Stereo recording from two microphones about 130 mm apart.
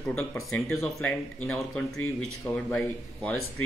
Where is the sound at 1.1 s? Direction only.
15° left (ahead or behind).